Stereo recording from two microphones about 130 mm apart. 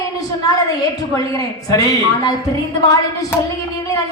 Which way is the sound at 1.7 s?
30° left (ahead or behind).